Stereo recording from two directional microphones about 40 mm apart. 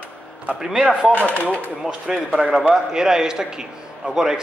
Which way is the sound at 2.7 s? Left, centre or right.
Centre.